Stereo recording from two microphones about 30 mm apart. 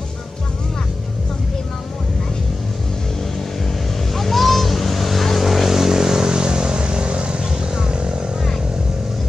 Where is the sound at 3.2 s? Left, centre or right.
Centre; by 8.4 s right.